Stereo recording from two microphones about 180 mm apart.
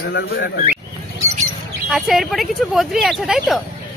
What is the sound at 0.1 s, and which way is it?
Speech, 70° left (ahead or behind).